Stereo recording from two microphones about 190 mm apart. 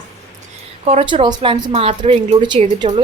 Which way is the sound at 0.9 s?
30° right (ahead or behind).